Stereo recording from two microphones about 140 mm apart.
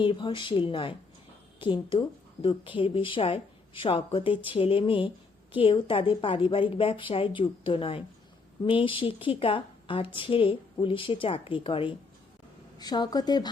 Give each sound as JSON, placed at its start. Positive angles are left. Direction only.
{"t": 0.0, "sound": "a woman's voice", "side_deg": 35}
{"t": 12.8, "sound": "speech", "side_deg": 30}